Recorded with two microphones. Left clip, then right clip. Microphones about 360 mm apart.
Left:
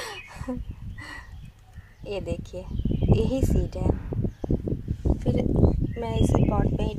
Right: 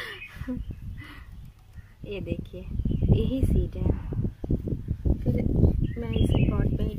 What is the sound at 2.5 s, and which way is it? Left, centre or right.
Speech, left.